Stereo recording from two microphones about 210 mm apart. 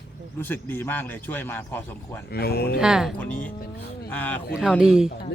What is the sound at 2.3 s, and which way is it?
Speech, 50° left (ahead or behind).